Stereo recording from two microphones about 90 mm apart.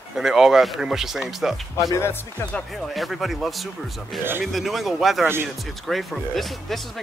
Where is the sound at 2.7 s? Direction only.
Centre (ahead or behind).